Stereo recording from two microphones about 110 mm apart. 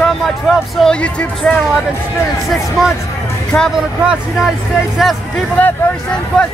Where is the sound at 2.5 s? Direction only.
Centre (ahead or behind).